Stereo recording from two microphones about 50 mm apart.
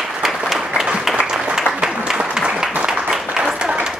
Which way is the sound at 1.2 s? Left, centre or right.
Centre.